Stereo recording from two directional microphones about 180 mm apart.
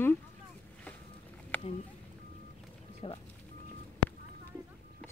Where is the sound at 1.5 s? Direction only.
10° left (ahead or behind).